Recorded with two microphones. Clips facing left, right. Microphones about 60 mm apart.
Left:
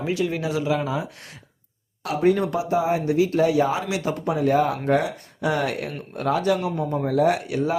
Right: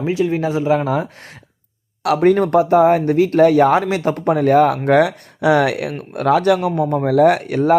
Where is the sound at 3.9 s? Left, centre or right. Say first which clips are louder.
Right 7 dB; right.